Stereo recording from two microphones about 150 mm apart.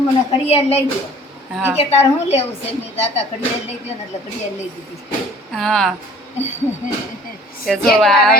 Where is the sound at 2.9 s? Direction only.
45° left (ahead or behind).